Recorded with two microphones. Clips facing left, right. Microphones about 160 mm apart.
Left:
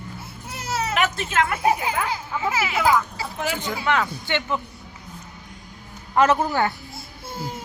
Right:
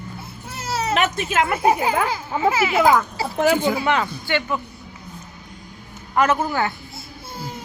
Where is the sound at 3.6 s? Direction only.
10° right (ahead or behind).